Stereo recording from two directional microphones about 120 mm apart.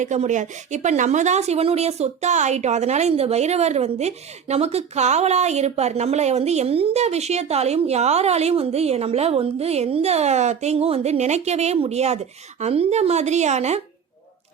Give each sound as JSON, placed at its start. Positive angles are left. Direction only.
{"t": 0.0, "sound": "speech", "side_deg": -80}